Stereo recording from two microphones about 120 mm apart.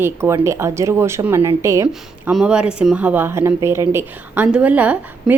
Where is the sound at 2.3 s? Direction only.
5° right (ahead or behind); by 4.4 s 20° right (ahead or behind).